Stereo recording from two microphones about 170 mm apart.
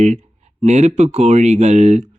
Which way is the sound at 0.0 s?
40° right (ahead or behind).